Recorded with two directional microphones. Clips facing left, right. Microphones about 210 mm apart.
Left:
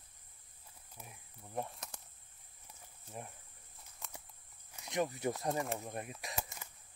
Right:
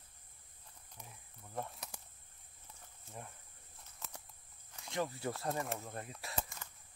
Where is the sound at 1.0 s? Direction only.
5° left (ahead or behind).